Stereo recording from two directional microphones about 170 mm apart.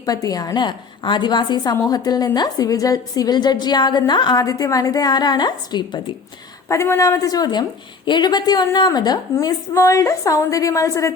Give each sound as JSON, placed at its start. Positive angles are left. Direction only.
{"t": 0.0, "sound": "a woman's voice", "side_deg": 20}